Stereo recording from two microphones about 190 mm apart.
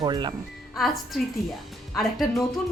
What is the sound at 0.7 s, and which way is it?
A woman's voice, centre (ahead or behind).